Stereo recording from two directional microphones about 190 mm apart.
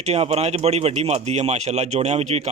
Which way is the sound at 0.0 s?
35° right (ahead or behind).